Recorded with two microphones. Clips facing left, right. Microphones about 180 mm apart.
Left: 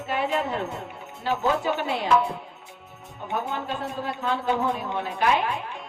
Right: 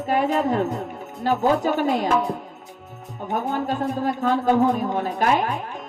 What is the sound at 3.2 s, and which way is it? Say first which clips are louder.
A man's voice: right 5 dB; 45° right (ahead or behind).